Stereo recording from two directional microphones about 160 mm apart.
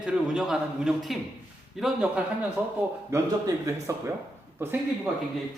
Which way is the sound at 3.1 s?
20° right (ahead or behind).